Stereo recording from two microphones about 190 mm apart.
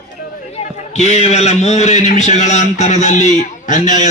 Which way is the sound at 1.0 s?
35° left (ahead or behind).